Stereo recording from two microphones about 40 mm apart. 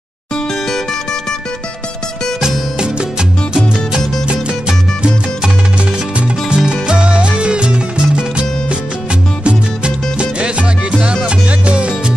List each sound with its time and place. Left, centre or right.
4.3 s music: right